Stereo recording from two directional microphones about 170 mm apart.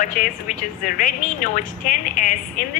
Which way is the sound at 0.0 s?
50° left (ahead or behind).